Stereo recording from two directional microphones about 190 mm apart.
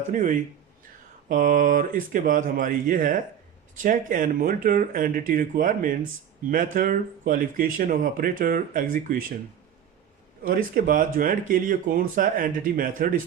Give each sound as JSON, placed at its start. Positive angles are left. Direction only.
{"t": 0.1, "sound": "speech", "side_deg": -40}
{"t": 10.4, "sound": "speech", "side_deg": -45}